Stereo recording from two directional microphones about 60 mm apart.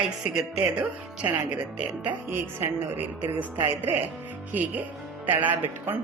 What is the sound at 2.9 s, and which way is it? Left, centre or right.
A man's voice, right.